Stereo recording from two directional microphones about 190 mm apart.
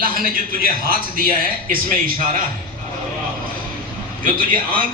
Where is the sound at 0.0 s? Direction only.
50° right (ahead or behind).